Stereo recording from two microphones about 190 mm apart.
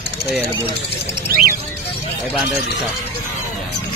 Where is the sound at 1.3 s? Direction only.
50° right (ahead or behind).